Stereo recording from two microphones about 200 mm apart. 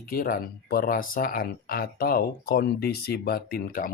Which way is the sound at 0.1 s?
45° left (ahead or behind).